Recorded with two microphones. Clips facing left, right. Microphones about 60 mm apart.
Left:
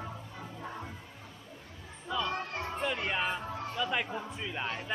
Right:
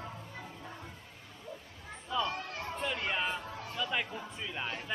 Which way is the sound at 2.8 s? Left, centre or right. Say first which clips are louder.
Left 1 dB; centre.